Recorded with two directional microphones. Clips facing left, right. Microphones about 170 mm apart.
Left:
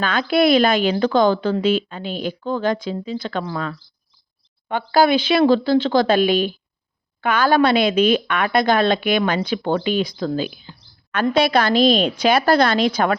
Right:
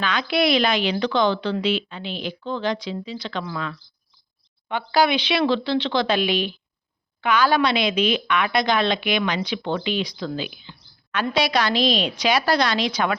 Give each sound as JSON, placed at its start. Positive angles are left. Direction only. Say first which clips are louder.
{"t": 0.0, "sound": "speech", "louder": "left 5 dB", "side_deg": 50}